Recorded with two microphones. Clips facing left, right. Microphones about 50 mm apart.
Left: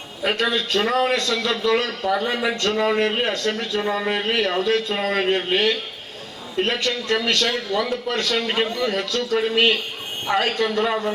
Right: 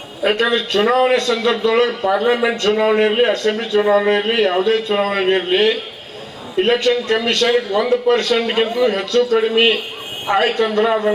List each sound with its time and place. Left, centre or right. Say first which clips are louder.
0.2 s a man's voice: right 5 dB; right